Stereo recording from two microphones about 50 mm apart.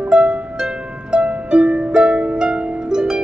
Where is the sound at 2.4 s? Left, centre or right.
Centre.